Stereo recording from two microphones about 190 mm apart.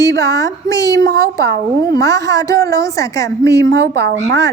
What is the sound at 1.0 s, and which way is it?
Speech, 60° right (ahead or behind).